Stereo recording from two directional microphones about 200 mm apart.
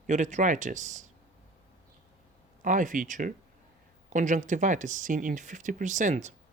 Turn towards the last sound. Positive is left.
turn(degrees=-35)  # may be behind; listen again after turning